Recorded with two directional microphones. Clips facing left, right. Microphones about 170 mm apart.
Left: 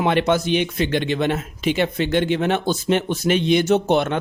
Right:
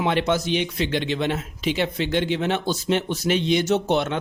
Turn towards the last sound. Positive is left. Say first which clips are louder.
# left 3 dB
turn(degrees=55)  # may be behind; listen again after turning